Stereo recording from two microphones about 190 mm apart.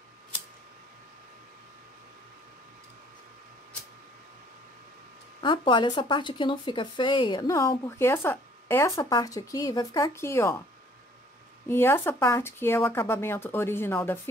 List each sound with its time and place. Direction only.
5.4 s speech: 25° left (ahead or behind)
11.6 s speech: 10° left (ahead or behind)